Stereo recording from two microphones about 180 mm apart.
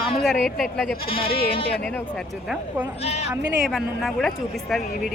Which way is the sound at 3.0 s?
35° left (ahead or behind).